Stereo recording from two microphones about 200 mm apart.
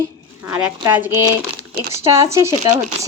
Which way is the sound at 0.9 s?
10° right (ahead or behind).